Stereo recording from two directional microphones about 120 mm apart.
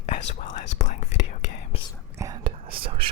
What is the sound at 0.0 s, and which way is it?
Whispering, 70° left (ahead or behind).